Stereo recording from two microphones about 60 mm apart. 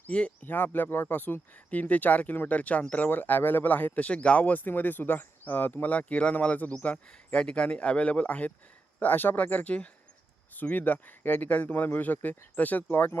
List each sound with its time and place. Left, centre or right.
0.1 s speech: left